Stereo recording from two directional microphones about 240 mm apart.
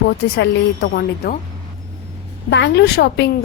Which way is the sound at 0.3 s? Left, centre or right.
Left.